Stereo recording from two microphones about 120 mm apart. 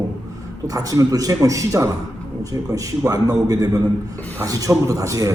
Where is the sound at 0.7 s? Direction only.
30° right (ahead or behind).